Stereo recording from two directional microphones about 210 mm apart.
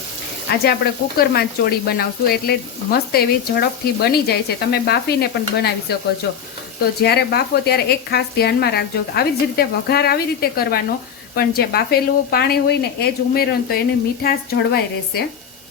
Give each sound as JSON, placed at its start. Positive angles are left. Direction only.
{"t": 0.5, "sound": "speech", "side_deg": 45}